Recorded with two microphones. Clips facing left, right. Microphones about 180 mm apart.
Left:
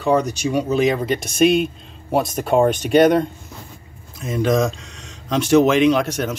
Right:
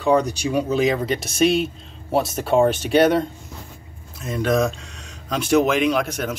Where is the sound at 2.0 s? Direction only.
Centre (ahead or behind).